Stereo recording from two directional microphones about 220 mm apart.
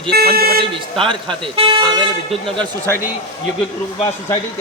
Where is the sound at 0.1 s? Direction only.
45° right (ahead or behind).